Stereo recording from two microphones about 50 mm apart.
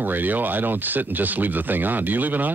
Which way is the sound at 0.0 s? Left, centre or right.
Right.